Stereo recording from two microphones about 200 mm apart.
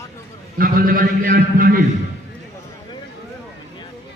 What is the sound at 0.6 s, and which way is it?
A man's voice, 45° right (ahead or behind).